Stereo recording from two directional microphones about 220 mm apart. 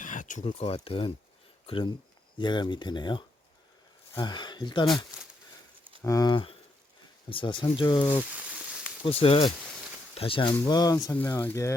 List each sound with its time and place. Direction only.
0.0 s speech: 35° left (ahead or behind); by 4.9 s 20° left (ahead or behind)
6.0 s speech: 15° left (ahead or behind)
8.4 s frying: 5° right (ahead or behind)
9.0 s speech: 25° left (ahead or behind); by 11.7 s 10° left (ahead or behind)